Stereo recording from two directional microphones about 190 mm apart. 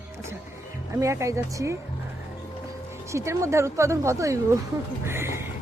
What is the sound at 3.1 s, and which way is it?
Speech, 15° right (ahead or behind).